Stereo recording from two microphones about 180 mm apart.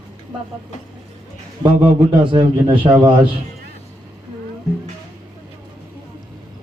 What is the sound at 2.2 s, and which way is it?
Speech, 25° right (ahead or behind).